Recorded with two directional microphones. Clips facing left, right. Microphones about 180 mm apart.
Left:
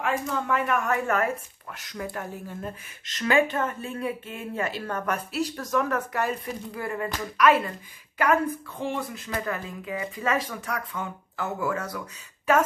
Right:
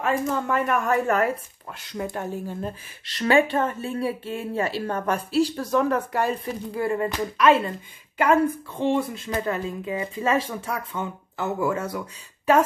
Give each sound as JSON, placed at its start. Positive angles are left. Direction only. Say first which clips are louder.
{"t": 0.0, "sound": "speech", "louder": "right 4 dB", "side_deg": -40}